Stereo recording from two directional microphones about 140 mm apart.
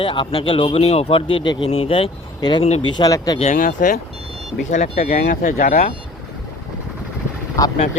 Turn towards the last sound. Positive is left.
turn(degrees=20)  # may be behind; listen again after turning